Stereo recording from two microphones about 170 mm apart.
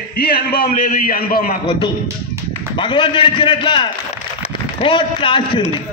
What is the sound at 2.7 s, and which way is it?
A man's voice, 30° left (ahead or behind).